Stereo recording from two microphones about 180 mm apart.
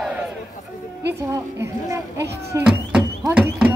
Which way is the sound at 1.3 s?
15° right (ahead or behind).